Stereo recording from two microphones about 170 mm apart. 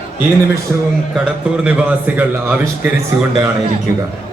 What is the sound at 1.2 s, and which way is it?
A man's voice, 5° right (ahead or behind).